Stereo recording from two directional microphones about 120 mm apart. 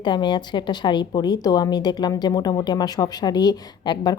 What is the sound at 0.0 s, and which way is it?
A woman's voice, 40° left (ahead or behind).